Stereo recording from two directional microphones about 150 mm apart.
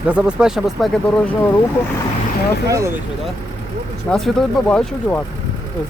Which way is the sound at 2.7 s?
20° right (ahead or behind).